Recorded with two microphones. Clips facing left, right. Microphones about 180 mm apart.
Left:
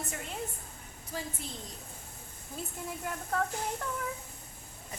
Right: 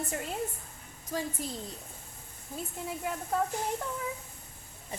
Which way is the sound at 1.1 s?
40° right (ahead or behind).